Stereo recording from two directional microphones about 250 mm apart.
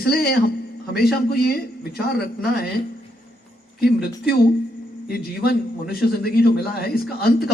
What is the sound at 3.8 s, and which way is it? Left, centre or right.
A man's voice, left.